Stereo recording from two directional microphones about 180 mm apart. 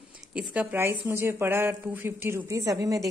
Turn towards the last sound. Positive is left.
turn(degrees=-20)  # may be behind; listen again after turning